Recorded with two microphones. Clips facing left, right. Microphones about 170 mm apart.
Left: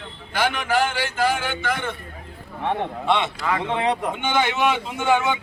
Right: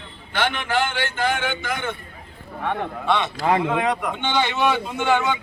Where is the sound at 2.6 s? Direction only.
20° left (ahead or behind).